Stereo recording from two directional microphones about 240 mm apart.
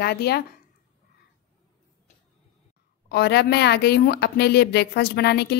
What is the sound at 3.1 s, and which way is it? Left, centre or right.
A woman's voice, left.